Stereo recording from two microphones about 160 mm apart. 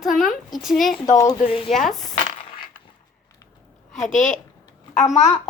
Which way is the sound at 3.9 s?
50° left (ahead or behind).